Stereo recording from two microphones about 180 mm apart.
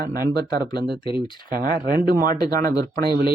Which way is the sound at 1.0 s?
30° left (ahead or behind).